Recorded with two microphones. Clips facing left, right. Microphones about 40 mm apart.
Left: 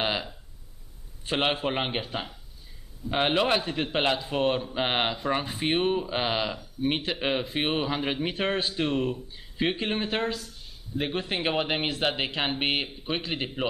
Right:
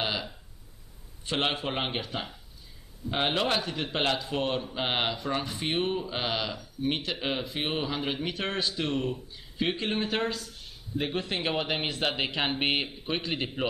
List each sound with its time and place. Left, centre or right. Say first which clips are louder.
0.0 s a sound: left 3 dB; left
1.2 s speech: left 3 dB; centre
3.1 s speech: left 3 dB; centre
11.0 s speech: left 1 dB; centre